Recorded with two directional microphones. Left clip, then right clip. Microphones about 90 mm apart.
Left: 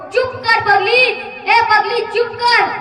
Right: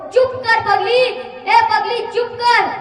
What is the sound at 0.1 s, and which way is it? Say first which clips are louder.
A woman's voice: right 1 dB; 20° right (ahead or behind).